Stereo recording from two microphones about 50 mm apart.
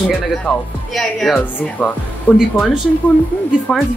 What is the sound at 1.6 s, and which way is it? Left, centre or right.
Speech, left.